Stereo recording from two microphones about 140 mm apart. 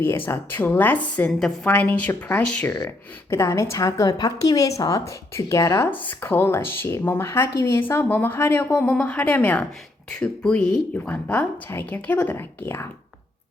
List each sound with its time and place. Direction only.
0.3 s a woman's voice: 15° left (ahead or behind)
2.7 s a woman's voice: 20° left (ahead or behind)